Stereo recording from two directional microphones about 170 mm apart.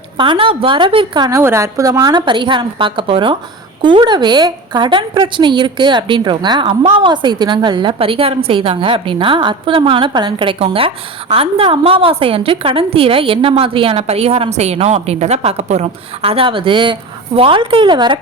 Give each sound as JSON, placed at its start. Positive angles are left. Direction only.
{"t": 0.2, "sound": "a woman's voice", "side_deg": -30}